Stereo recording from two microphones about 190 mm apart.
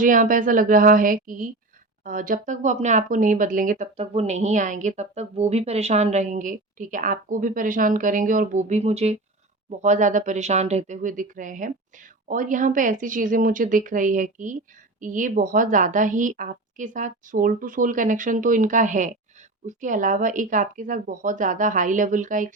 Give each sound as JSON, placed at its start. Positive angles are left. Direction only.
{"t": 0.0, "sound": "a woman's voice", "side_deg": -45}